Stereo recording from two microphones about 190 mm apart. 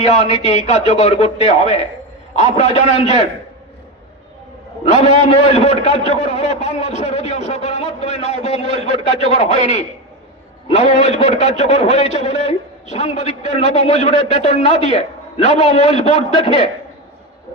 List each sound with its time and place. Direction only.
0.0 s a man's voice: 35° left (ahead or behind)
4.9 s a man's voice: 35° left (ahead or behind)